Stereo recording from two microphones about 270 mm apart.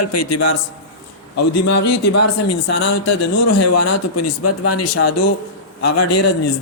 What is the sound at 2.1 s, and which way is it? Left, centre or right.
Speech, left.